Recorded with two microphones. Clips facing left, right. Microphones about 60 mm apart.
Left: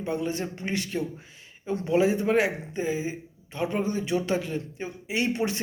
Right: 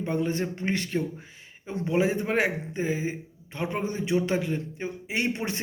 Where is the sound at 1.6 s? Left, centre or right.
Right.